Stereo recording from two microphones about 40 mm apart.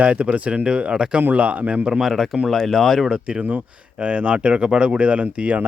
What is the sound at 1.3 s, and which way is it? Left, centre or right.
Speech, right.